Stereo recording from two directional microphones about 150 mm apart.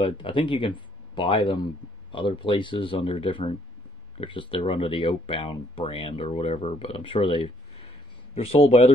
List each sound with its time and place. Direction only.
0.0 s speech: 35° left (ahead or behind)